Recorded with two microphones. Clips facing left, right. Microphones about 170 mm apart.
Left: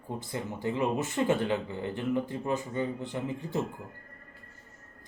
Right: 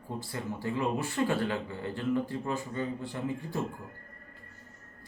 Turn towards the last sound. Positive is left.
turn(degrees=20)  # may be behind; listen again after turning